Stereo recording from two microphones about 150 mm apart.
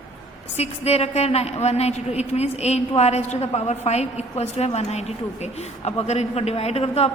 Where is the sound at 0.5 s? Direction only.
45° left (ahead or behind).